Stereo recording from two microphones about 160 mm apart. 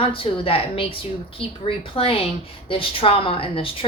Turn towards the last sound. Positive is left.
turn(degrees=35)  # may be behind; listen again after turning